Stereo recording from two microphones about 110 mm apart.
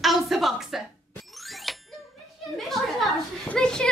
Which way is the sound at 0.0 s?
Centre (ahead or behind).